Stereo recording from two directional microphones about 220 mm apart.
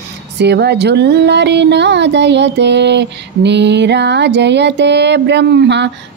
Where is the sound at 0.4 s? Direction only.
50° right (ahead or behind).